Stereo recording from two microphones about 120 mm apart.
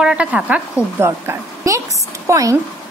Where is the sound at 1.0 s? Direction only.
25° right (ahead or behind).